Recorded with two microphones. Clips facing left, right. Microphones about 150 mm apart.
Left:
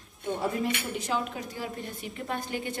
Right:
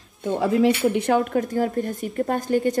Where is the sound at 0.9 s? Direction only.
60° right (ahead or behind).